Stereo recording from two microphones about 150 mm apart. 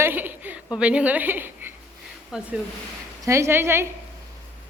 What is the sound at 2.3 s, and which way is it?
Speech, 5° right (ahead or behind).